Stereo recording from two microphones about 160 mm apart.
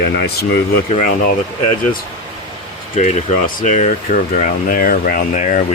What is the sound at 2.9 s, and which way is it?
Speech, 50° left (ahead or behind).